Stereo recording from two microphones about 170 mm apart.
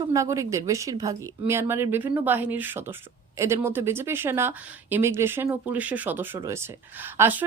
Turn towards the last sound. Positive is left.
turn(degrees=-10)  # may be behind; listen again after turning